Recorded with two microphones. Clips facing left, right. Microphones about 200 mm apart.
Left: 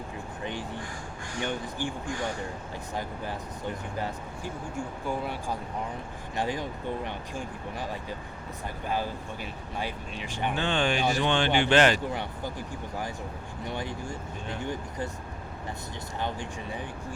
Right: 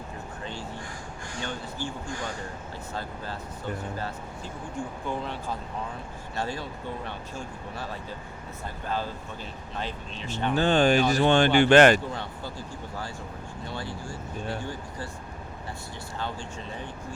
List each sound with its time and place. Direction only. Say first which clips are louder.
1.4 s speech: left 3 dB; 15° left (ahead or behind)
2.9 s speech: left 2 dB; 15° left (ahead or behind)
10.5 s speech: right 7 dB; 40° right (ahead or behind)
12.1 s speech: left 2 dB; 15° left (ahead or behind)
16.1 s speech: left 2 dB; 15° left (ahead or behind)